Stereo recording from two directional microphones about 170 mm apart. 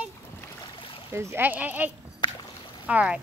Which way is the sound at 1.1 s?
15° right (ahead or behind).